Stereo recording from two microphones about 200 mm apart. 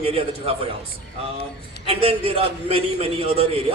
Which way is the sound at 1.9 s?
30° right (ahead or behind).